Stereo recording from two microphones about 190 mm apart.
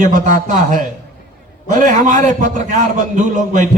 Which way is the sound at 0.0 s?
45° right (ahead or behind).